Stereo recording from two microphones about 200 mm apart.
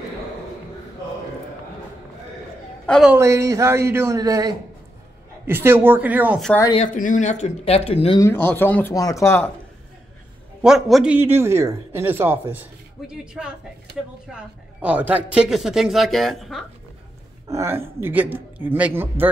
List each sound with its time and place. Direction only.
2.9 s a woman's voice: centre (ahead or behind)
3.2 s a man's voice: 15° right (ahead or behind)
6.8 s speech: 40° left (ahead or behind)
8.2 s speech: 10° left (ahead or behind)
10.6 s a man's voice: centre (ahead or behind)
17.5 s a man's voice: 15° right (ahead or behind)